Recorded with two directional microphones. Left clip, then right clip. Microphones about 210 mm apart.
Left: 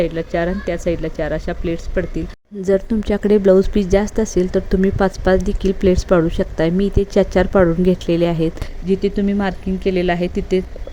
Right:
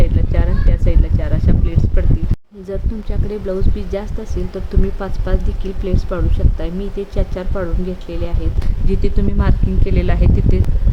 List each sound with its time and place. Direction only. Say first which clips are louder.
0.0 s speech: left 6 dB; 25° left (ahead or behind)
8.9 s speech: left 5 dB; 15° left (ahead or behind)